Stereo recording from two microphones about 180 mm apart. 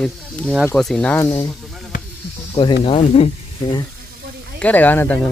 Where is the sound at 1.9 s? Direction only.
50° left (ahead or behind).